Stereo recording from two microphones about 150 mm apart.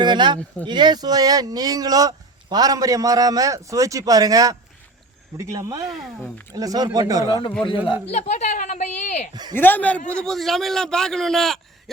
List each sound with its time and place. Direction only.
0.0 s speech: 30° right (ahead or behind)
5.9 s a man's voice: centre (ahead or behind)
6.5 s speech: 25° right (ahead or behind)
8.0 s a woman's voice: 50° left (ahead or behind)
9.3 s speech: 30° right (ahead or behind)
9.6 s a man's voice: 10° left (ahead or behind)